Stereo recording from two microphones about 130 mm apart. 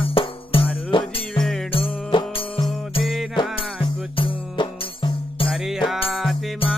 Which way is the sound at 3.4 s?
40° left (ahead or behind).